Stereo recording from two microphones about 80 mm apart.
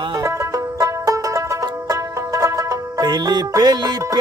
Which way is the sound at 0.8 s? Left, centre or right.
Right.